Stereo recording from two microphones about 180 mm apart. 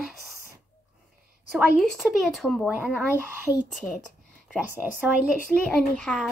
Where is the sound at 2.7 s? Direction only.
10° right (ahead or behind).